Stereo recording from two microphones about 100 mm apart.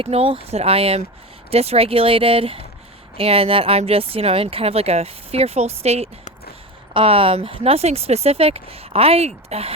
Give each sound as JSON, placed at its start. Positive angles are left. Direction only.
{"t": 0.0, "sound": "speech", "side_deg": -70}
{"t": 6.9, "sound": "speech", "side_deg": -65}